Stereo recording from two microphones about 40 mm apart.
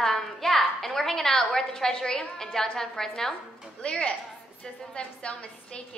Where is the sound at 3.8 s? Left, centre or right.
Left.